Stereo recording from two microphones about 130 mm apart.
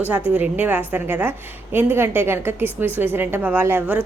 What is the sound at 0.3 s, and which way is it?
A woman's voice, 10° right (ahead or behind).